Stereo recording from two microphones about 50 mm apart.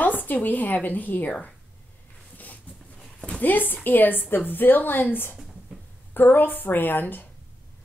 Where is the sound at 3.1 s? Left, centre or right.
Left.